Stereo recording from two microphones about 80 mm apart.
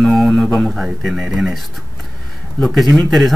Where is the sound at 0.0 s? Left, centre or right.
Centre.